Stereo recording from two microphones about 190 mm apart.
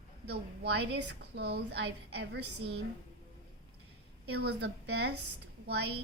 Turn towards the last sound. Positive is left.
turn(degrees=-60)  # may be behind; listen again after turning